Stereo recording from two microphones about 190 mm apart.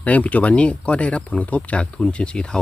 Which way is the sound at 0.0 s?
5° left (ahead or behind).